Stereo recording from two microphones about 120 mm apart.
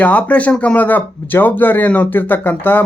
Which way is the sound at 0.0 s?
10° left (ahead or behind).